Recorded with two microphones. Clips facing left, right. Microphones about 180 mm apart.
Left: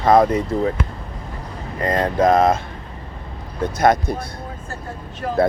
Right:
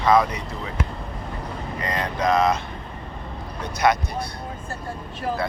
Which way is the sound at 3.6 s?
50° left (ahead or behind).